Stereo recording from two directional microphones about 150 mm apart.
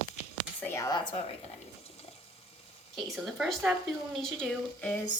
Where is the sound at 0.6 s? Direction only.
20° left (ahead or behind).